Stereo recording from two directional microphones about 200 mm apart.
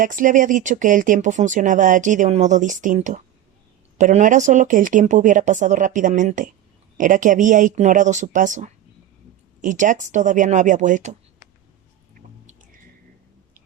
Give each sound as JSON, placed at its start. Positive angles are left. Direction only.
{"t": 0.0, "sound": "speech", "side_deg": -40}